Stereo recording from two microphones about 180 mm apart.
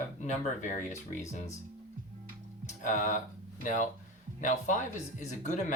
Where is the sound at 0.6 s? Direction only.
45° left (ahead or behind).